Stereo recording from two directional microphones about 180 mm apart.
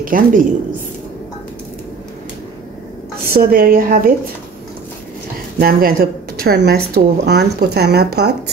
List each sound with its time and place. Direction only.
0.0 s a woman's voice: 50° right (ahead or behind)
3.3 s speech: 55° right (ahead or behind)
5.6 s speech: 55° right (ahead or behind)